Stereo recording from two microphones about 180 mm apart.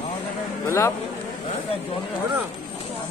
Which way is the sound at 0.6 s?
15° left (ahead or behind).